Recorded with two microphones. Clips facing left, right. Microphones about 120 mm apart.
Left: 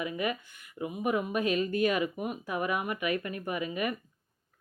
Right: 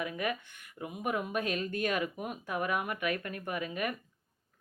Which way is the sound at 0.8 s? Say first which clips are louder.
Left 4 dB; 5° left (ahead or behind).